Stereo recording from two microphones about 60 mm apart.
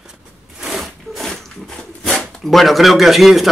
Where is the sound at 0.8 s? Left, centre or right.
Centre.